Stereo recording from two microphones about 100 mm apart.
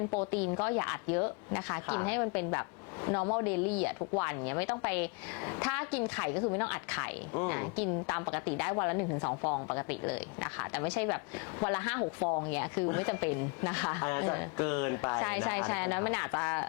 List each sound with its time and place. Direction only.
0.1 s speech: 15° left (ahead or behind)